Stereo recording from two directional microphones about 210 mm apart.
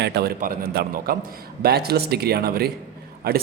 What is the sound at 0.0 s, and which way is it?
A man's voice, 50° right (ahead or behind).